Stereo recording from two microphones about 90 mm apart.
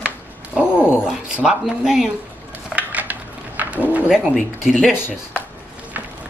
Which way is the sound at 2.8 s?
15° right (ahead or behind).